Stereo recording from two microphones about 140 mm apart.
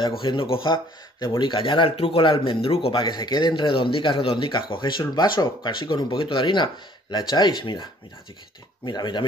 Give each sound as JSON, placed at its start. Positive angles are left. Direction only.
{"t": 0.2, "sound": "speech", "side_deg": 40}
{"t": 3.0, "sound": "speech", "side_deg": 30}